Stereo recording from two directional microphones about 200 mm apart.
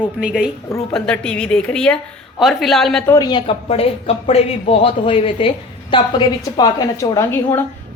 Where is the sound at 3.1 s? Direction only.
20° left (ahead or behind).